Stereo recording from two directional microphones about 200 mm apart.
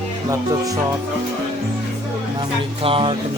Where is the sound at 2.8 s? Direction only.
25° right (ahead or behind).